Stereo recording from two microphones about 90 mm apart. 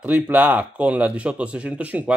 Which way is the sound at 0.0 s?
15° right (ahead or behind).